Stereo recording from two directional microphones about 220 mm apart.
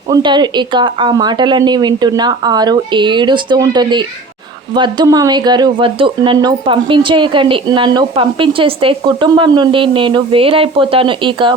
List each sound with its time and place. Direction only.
0.1 s speech: 20° right (ahead or behind)